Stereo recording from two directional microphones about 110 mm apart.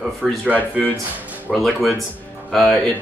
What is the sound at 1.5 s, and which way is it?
Speech, centre (ahead or behind).